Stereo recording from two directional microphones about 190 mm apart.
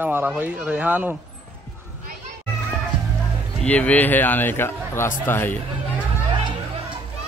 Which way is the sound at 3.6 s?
10° left (ahead or behind).